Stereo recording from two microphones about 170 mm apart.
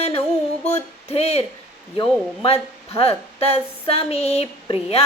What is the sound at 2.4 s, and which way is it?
Speech, 35° left (ahead or behind).